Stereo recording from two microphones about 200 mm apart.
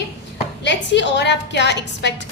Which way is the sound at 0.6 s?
60° left (ahead or behind).